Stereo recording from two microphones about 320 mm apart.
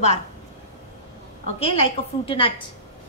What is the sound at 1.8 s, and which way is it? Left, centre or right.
Speech, centre.